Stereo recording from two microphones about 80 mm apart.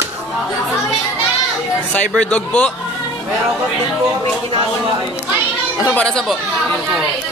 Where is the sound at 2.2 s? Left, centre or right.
Centre.